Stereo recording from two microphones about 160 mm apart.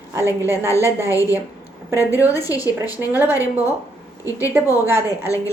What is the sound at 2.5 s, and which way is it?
Speech, 20° left (ahead or behind).